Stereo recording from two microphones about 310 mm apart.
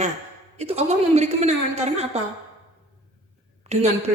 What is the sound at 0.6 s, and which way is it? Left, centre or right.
Speech, right.